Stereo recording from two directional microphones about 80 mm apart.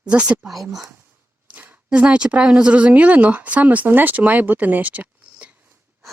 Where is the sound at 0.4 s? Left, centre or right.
Centre.